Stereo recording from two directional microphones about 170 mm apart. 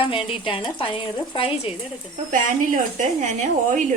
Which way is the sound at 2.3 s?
50° right (ahead or behind).